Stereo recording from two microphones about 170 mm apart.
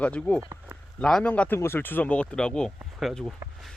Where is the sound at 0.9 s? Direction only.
5° left (ahead or behind).